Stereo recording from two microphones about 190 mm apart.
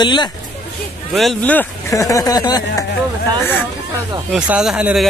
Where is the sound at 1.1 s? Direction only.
Centre (ahead or behind); by 2.7 s 20° left (ahead or behind).